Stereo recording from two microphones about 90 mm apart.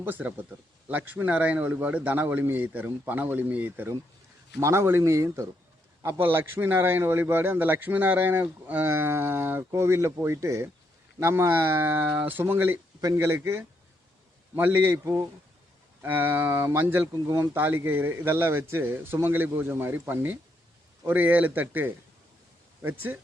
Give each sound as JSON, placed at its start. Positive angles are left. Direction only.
{"t": 0.0, "sound": "a man's voice", "side_deg": -20}
{"t": 4.6, "sound": "speech", "side_deg": -30}
{"t": 6.2, "sound": "a man's voice", "side_deg": -25}
{"t": 11.2, "sound": "a man's voice", "side_deg": -25}